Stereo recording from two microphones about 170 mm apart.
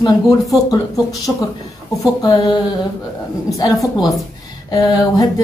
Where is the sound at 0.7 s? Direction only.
20° left (ahead or behind).